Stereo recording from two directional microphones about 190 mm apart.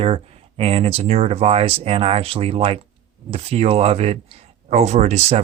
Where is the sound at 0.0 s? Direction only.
30° right (ahead or behind).